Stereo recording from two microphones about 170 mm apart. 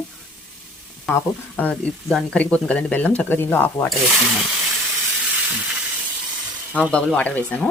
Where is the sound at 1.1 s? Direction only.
10° left (ahead or behind).